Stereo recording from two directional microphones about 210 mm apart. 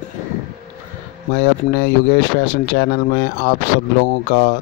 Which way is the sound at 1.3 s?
60° left (ahead or behind).